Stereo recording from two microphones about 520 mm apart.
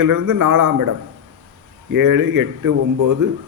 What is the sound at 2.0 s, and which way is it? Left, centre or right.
A man's voice, right.